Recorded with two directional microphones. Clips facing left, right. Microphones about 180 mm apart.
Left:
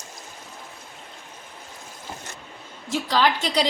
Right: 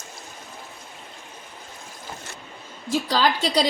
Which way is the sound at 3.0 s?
35° right (ahead or behind).